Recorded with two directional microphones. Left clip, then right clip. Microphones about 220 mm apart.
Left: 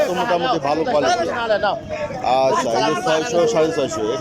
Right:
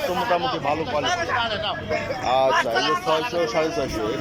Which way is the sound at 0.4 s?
50° left (ahead or behind).